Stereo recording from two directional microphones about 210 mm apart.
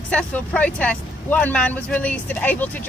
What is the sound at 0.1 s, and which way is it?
Speech, 5° left (ahead or behind).